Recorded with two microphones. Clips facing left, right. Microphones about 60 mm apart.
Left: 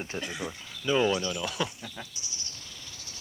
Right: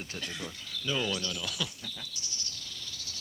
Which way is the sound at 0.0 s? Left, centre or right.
Left.